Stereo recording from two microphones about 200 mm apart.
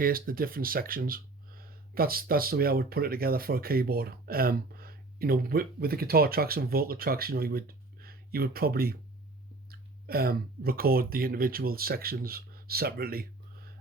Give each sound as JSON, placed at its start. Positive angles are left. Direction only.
{"t": 0.0, "sound": "speech", "side_deg": -45}